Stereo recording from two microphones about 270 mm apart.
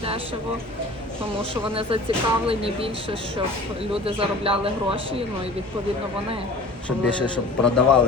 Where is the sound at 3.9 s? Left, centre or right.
Right.